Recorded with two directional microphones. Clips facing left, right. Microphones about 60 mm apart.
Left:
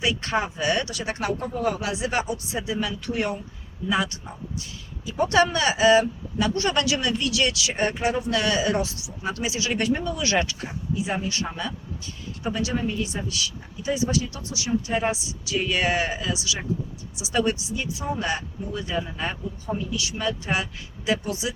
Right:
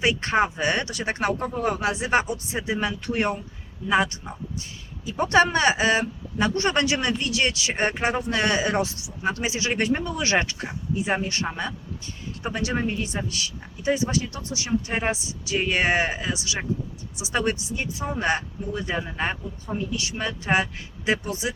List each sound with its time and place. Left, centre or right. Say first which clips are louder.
0.0 s speech: right 3 dB; right
12.5 s speech: right 1 dB; right